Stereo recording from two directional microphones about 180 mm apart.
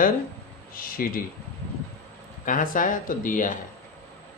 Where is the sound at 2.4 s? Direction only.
50° left (ahead or behind).